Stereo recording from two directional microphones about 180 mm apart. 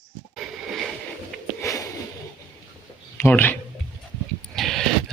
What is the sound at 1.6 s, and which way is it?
Sniff, 20° left (ahead or behind).